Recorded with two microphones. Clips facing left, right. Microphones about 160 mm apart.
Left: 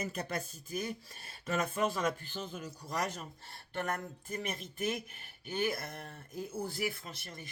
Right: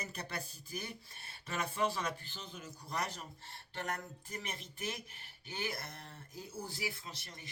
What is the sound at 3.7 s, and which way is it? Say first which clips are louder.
Speech: left 5 dB; 50° left (ahead or behind).